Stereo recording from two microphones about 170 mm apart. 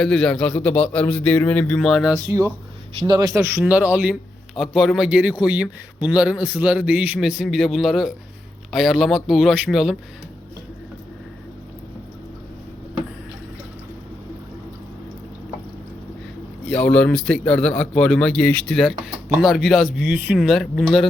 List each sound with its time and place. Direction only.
0.0 s a man's voice: 5° left (ahead or behind)
2.1 s speech: 15° right (ahead or behind)
3.6 s a man's voice: 10° right (ahead or behind)
16.6 s a man's voice: 5° left (ahead or behind)